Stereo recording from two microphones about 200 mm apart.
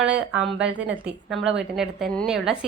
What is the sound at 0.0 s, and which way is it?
A woman's voice, 5° right (ahead or behind).